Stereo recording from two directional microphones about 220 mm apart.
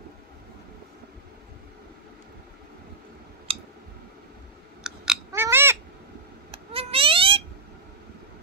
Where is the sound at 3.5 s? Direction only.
25° right (ahead or behind).